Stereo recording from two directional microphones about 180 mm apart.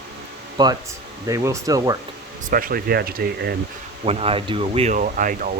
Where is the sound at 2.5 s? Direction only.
55° right (ahead or behind).